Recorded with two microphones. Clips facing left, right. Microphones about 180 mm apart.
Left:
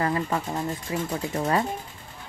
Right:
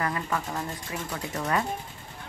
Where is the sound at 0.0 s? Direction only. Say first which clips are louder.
Left 4 dB; 30° left (ahead or behind).